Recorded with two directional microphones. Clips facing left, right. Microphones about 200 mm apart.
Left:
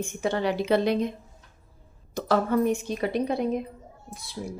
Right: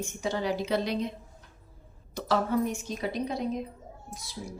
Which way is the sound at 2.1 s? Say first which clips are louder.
Left 3 dB; 55° left (ahead or behind).